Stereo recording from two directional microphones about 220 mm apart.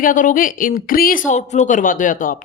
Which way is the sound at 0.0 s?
35° left (ahead or behind).